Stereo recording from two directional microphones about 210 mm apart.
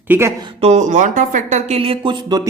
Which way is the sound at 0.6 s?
30° right (ahead or behind).